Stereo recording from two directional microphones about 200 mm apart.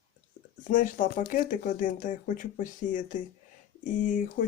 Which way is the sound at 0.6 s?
40° left (ahead or behind).